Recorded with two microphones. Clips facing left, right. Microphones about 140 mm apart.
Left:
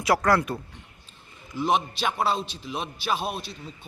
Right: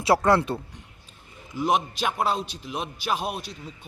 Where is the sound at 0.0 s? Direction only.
25° right (ahead or behind).